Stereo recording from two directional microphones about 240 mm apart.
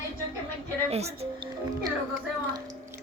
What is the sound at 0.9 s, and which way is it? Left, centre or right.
Speech, right.